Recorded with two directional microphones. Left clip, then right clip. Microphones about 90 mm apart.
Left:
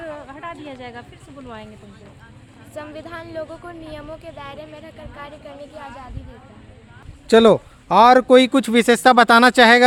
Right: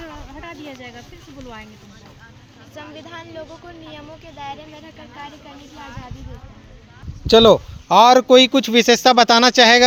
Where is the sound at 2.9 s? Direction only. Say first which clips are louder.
Left 3 dB; 50° left (ahead or behind).